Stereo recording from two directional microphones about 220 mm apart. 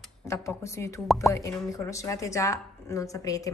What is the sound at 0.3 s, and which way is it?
A woman's voice, 10° left (ahead or behind).